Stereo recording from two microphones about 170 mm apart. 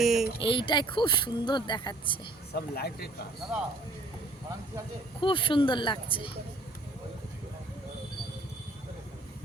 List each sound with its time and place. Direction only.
0.0 s a sound: centre (ahead or behind)
0.3 s speech: 30° left (ahead or behind)
2.6 s speech: 65° left (ahead or behind)
5.2 s speech: 30° left (ahead or behind)